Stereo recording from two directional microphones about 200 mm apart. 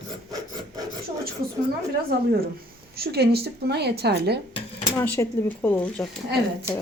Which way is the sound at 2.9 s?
55° right (ahead or behind).